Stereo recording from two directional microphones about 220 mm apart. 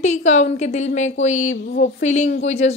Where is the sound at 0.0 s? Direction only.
30° left (ahead or behind).